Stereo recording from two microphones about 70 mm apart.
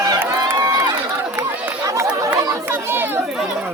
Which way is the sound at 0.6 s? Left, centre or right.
Right.